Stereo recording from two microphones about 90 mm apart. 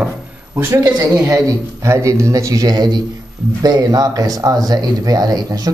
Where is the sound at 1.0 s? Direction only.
40° right (ahead or behind).